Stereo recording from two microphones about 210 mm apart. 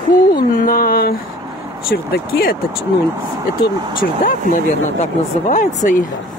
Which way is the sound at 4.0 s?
40° left (ahead or behind).